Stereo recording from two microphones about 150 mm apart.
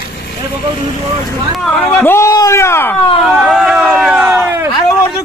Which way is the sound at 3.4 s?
Centre (ahead or behind).